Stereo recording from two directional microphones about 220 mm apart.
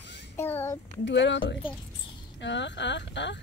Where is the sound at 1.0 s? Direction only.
55° left (ahead or behind).